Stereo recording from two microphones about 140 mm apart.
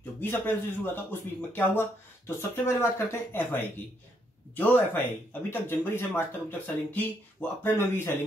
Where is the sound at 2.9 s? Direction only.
15° left (ahead or behind).